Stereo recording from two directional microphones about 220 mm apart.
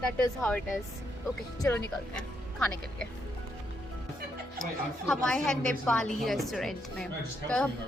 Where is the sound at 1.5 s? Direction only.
15° left (ahead or behind).